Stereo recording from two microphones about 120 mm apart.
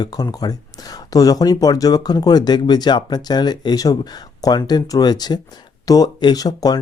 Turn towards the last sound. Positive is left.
turn(degrees=30)  # may be behind; listen again after turning